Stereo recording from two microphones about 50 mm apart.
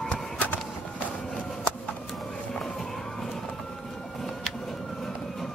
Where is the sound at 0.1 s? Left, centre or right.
Left.